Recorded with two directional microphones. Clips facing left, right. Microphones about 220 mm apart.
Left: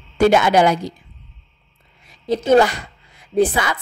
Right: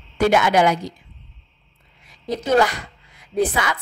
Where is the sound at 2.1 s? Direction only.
30° left (ahead or behind).